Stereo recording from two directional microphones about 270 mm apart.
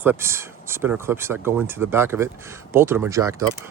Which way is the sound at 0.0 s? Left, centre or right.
Centre.